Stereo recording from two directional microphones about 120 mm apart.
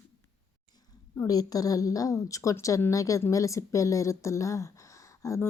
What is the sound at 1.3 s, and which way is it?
A woman's voice, 30° left (ahead or behind).